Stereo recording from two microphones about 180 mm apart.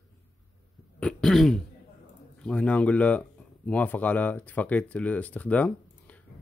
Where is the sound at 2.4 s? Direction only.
5° left (ahead or behind).